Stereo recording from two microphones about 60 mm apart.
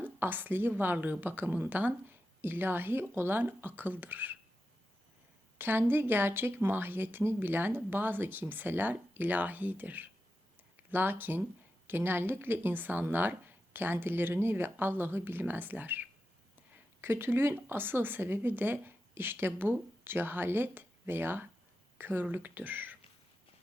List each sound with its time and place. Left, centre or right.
0.0 s speech: right
5.5 s speech: right
16.7 s speech: right